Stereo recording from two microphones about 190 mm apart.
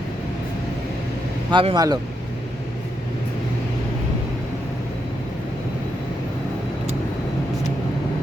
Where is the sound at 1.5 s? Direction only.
25° right (ahead or behind).